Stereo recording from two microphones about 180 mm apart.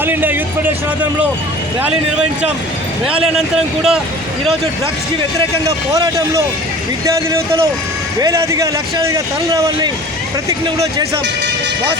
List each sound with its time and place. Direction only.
0.0 s speech: 10° right (ahead or behind)
1.8 s speech: 10° right (ahead or behind)
5.6 s speech: 15° right (ahead or behind)